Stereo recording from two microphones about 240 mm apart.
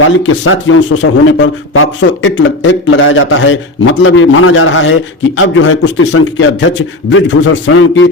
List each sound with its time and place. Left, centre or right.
0.2 s a man's voice: left